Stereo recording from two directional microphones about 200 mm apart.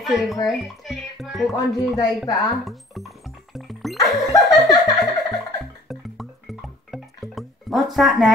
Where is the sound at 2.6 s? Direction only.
Centre (ahead or behind).